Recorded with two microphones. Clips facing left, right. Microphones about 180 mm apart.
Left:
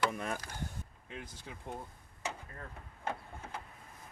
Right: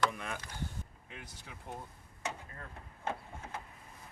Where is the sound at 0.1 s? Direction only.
40° left (ahead or behind).